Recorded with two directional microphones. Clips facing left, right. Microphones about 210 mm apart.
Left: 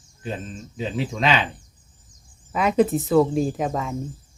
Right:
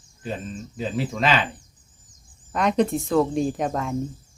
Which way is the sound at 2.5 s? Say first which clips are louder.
Left 2 dB; 5° left (ahead or behind).